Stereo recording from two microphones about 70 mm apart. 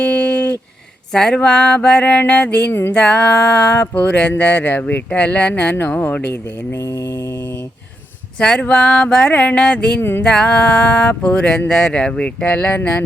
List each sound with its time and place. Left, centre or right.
0.0 s a sound: centre
1.1 s speech: centre
6.7 s mantra: left
8.4 s speech: centre
10.0 s a sound: left
10.2 s speech: centre